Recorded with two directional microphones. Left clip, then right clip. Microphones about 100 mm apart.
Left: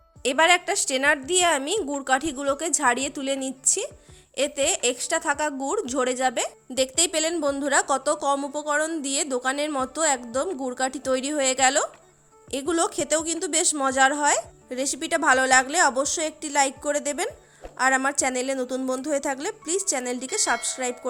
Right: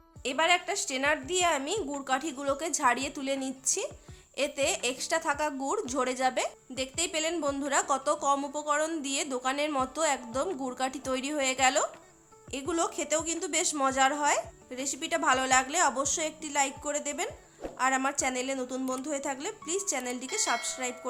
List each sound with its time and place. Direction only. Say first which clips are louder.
0.2 s a woman's voice: left 7 dB; 90° left; by 6.5 s 45° left (ahead or behind)
7.0 s a woman's voice: left 3 dB; 80° left
7.6 s a woman's voice: left 6 dB; 60° left (ahead or behind)
14.7 s a woman's voice: left 8 dB; 70° left (ahead or behind)